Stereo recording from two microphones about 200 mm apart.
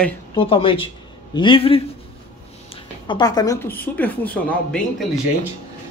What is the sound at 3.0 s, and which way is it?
A woman's voice, 20° left (ahead or behind).